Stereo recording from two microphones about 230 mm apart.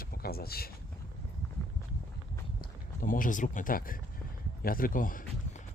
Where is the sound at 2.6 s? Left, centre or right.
Left.